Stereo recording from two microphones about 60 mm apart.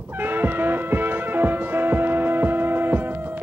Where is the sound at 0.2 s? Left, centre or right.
Right.